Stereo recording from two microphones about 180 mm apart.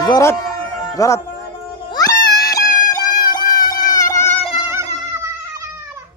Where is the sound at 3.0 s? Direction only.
20° left (ahead or behind).